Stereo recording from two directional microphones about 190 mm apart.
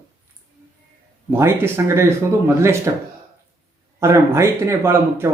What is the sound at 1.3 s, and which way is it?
Speech, 15° right (ahead or behind).